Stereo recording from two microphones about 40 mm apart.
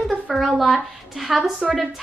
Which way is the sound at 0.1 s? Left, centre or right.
Centre.